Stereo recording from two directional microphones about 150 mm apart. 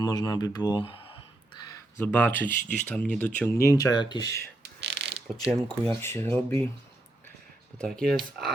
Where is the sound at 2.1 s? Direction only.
10° left (ahead or behind).